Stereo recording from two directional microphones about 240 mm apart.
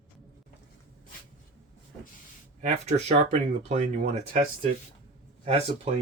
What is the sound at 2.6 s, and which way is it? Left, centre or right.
Speech, right.